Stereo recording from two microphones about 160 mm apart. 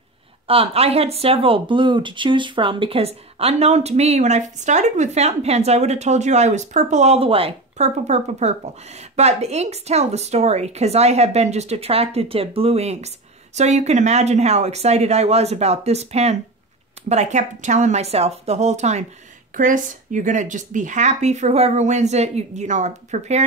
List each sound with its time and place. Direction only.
0.5 s speech: 35° right (ahead or behind)